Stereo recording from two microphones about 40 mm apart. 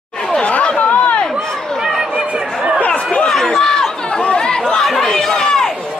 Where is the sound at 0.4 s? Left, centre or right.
Left.